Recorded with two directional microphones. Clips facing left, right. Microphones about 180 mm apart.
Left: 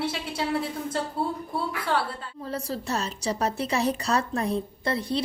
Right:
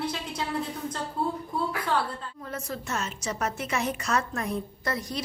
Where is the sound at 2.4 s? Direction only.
35° left (ahead or behind).